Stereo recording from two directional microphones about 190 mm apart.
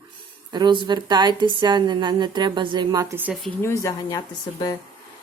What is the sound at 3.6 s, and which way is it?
Speech, 15° left (ahead or behind).